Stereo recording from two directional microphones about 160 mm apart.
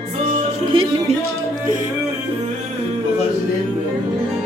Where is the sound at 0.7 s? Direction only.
35° right (ahead or behind).